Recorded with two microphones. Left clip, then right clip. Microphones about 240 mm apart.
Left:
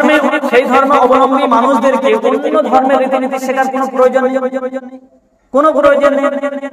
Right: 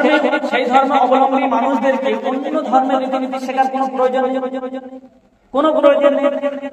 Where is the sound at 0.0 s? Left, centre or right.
Left.